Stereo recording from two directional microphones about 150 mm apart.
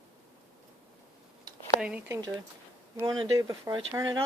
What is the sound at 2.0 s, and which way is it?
Speech, 20° right (ahead or behind).